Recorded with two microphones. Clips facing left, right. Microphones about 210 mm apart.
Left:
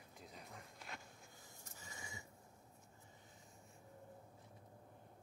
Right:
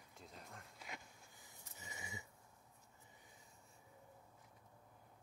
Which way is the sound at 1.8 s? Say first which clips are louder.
Right 2 dB; 20° right (ahead or behind).